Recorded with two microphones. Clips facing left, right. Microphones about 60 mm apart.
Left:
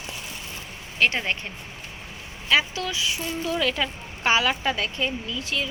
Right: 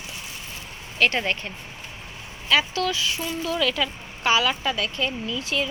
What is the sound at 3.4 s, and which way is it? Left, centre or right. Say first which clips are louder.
Speech: right 1 dB; left.